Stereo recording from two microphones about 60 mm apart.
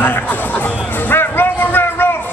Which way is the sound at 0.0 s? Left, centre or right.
Left.